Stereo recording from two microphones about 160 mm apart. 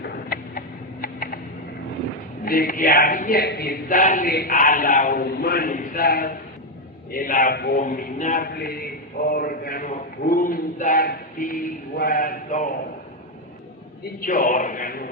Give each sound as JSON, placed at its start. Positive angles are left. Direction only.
{"t": 0.0, "sound": "a sound", "side_deg": 65}
{"t": 2.4, "sound": "a man's voice", "side_deg": 65}
{"t": 7.8, "sound": "speech", "side_deg": 50}
{"t": 8.5, "sound": "a man's voice", "side_deg": 70}
{"t": 14.3, "sound": "speech", "side_deg": 55}